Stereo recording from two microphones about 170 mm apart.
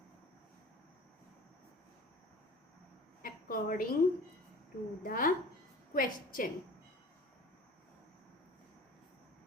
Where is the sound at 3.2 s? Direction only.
55° left (ahead or behind).